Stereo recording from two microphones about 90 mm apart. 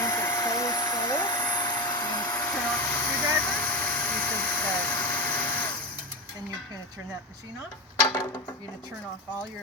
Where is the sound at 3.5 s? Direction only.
20° left (ahead or behind).